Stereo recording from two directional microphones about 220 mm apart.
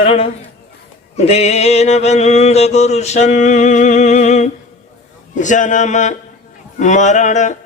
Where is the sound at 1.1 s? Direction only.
30° left (ahead or behind).